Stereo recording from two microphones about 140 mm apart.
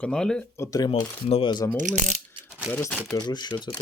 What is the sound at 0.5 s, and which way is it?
Speech, 20° left (ahead or behind).